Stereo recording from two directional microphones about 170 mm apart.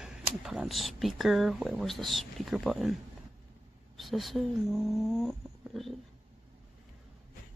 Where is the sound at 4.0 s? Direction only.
Centre (ahead or behind).